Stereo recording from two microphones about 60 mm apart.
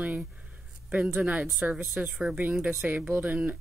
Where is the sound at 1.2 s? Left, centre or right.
Right.